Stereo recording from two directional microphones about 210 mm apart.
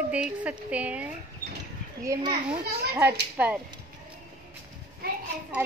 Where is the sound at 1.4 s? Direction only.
40° left (ahead or behind).